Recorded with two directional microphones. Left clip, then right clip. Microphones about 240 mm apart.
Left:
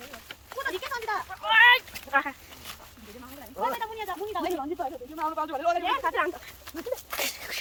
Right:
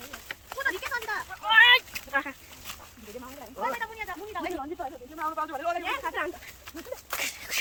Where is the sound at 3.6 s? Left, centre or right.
Left.